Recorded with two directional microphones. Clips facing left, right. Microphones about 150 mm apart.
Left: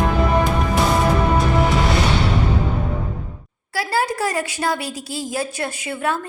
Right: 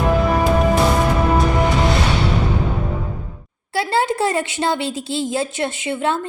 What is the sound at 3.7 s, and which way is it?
A woman's voice, 25° right (ahead or behind).